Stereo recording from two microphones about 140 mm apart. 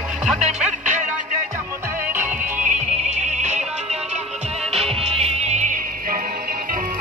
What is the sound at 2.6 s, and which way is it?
Music, 60° right (ahead or behind).